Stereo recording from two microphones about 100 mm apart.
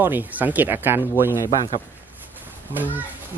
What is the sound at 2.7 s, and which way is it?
Speech, 20° right (ahead or behind).